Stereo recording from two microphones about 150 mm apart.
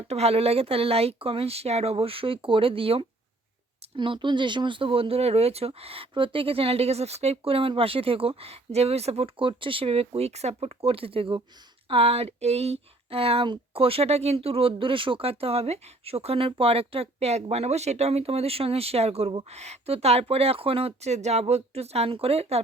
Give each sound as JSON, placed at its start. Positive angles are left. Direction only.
{"t": 0.1, "sound": "speech", "side_deg": -45}